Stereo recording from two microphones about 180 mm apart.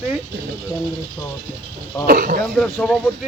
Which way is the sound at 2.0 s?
55° right (ahead or behind).